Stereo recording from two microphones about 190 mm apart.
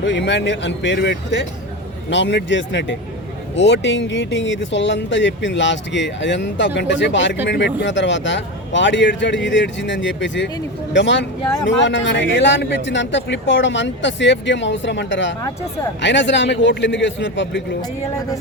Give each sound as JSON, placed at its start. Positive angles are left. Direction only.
{"t": 0.0, "sound": "speech", "side_deg": 70}